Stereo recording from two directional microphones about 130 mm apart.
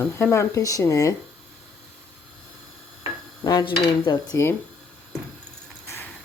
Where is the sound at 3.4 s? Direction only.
30° left (ahead or behind).